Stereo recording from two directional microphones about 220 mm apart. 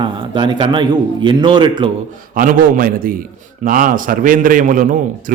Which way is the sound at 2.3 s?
40° right (ahead or behind).